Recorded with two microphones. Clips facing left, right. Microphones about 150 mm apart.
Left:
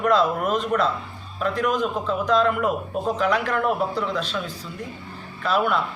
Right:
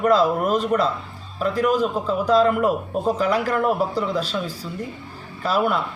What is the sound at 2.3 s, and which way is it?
A man's voice, 40° right (ahead or behind).